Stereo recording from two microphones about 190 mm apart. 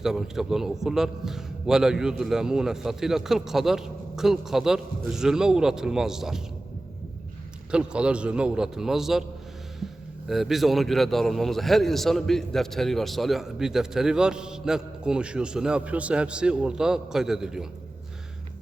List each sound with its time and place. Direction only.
0.0 s a man's voice: centre (ahead or behind)
7.7 s a man's voice: 5° right (ahead or behind)
10.2 s a man's voice: centre (ahead or behind)